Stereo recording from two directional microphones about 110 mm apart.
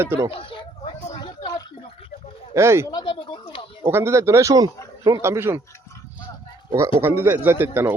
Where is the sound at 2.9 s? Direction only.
45° left (ahead or behind).